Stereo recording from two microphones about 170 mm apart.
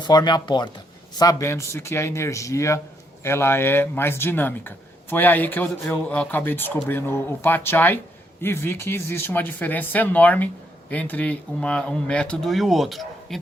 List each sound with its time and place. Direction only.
0.0 s speech: 25° left (ahead or behind); by 13.4 s centre (ahead or behind)